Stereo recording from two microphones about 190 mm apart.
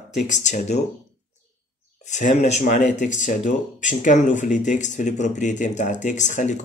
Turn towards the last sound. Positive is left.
turn(degrees=40)  # may be behind; listen again after turning